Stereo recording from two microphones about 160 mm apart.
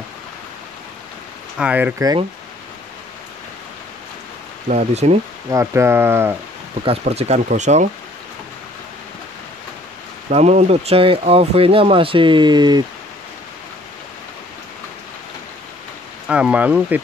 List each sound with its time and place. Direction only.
1.6 s speech: 10° right (ahead or behind)
4.6 s speech: 45° right (ahead or behind)
5.5 s speech: 20° right (ahead or behind)
6.8 s speech: 40° right (ahead or behind)
10.3 s speech: 45° right (ahead or behind); by 12.8 s 25° right (ahead or behind)
16.3 s speech: 5° right (ahead or behind)